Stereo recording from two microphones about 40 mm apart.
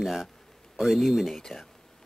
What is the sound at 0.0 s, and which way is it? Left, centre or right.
Speech, centre.